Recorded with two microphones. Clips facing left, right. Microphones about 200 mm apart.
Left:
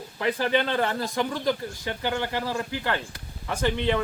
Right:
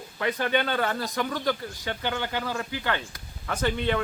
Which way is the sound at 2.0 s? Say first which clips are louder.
Left 3 dB; 5° left (ahead or behind).